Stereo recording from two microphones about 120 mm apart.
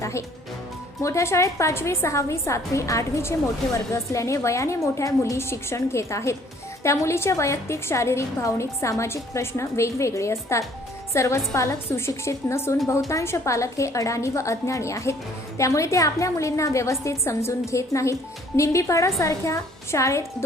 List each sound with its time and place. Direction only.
0.0 s a woman's voice: 25° left (ahead or behind)